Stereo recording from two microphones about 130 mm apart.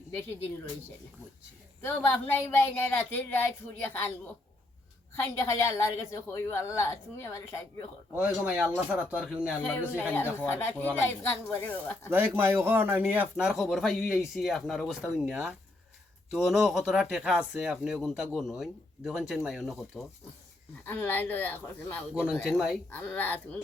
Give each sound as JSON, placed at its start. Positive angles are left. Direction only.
{"t": 1.8, "sound": "speech", "side_deg": 15}
{"t": 5.3, "sound": "a woman's voice", "side_deg": 20}
{"t": 8.1, "sound": "speech", "side_deg": -15}
{"t": 9.6, "sound": "speech", "side_deg": 15}
{"t": 12.1, "sound": "speech", "side_deg": -15}
{"t": 20.8, "sound": "speech", "side_deg": 15}
{"t": 22.1, "sound": "speech", "side_deg": -10}
{"t": 22.9, "sound": "speech", "side_deg": 15}